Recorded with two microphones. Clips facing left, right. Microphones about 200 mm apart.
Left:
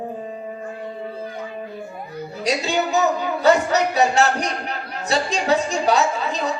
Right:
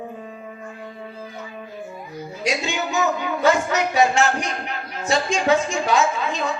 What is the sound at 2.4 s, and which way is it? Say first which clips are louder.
Speech: left 3 dB; 35° left (ahead or behind).